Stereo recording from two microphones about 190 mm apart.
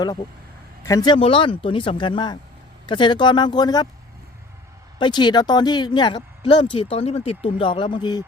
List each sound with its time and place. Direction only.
0.8 s speech: 15° left (ahead or behind)
4.9 s speech: 25° left (ahead or behind)